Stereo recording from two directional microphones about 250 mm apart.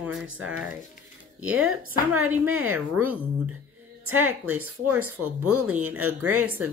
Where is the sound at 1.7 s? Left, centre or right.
Right.